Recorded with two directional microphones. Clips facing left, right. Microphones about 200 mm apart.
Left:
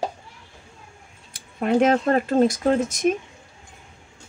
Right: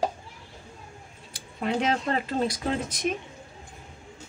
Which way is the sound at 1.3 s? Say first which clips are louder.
Left 8 dB; 50° left (ahead or behind).